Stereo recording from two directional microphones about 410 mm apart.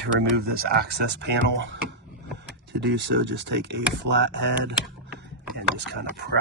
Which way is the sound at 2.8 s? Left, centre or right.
Right.